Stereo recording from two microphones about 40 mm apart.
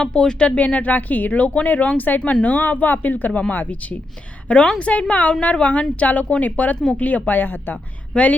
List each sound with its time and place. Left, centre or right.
0.0 s speech: left
0.6 s speech: left
2.6 s speech: left
4.4 s a woman's voice: left
8.1 s speech: left